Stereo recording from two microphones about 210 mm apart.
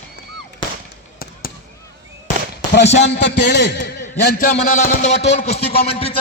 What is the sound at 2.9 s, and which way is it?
Speech, 30° left (ahead or behind).